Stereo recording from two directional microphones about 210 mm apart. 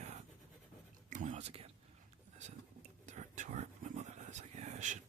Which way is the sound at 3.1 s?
35° right (ahead or behind).